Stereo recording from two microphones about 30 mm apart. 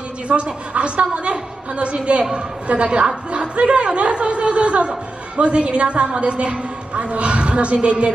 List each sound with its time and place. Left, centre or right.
0.3 s speech: right